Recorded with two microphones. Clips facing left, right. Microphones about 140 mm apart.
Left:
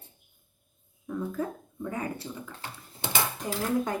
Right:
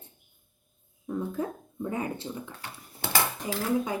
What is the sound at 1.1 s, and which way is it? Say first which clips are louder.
Speech: right 1 dB; 20° right (ahead or behind).